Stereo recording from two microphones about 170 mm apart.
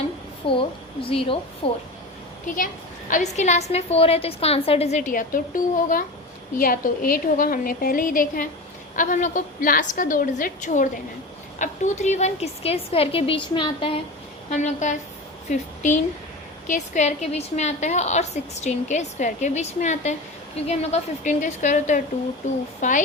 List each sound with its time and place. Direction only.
0.4 s a woman's voice: 30° left (ahead or behind)
2.5 s a woman's voice: 50° left (ahead or behind); by 14.0 s 30° left (ahead or behind)
14.5 s a woman's voice: 45° left (ahead or behind)